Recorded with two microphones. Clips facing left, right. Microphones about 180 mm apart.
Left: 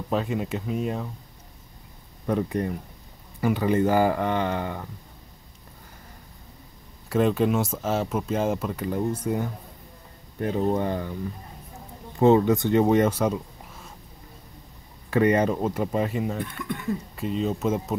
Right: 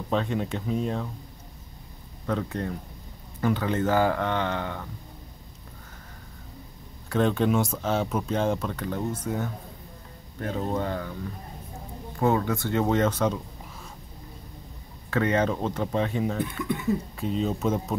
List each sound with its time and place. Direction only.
0.1 s speech: 5° left (ahead or behind)
2.2 s speech: 15° left (ahead or behind)
7.1 s speech: 5° left (ahead or behind)
12.2 s speech: 20° left (ahead or behind)
15.0 s speech: 10° left (ahead or behind)